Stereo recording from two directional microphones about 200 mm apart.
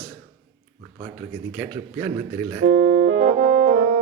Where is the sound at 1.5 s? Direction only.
10° right (ahead or behind).